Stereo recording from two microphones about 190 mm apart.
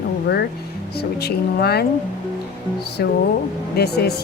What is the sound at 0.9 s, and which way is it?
Speech, 55° left (ahead or behind).